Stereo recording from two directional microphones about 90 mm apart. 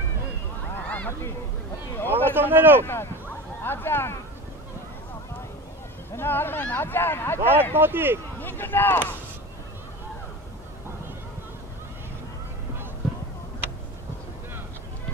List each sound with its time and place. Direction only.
0.7 s honk: 15° left (ahead or behind)
2.0 s a sound: 25° right (ahead or behind)
2.5 s speech: 25° right (ahead or behind)
2.8 s speech: 25° left (ahead or behind)
6.1 s speech: 25° left (ahead or behind)
7.3 s speech: 25° right (ahead or behind)
8.4 s speech: 25° left (ahead or behind)